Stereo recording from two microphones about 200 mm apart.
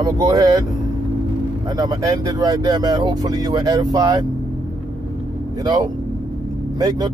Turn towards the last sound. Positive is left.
turn(degrees=-20)  # may be behind; listen again after turning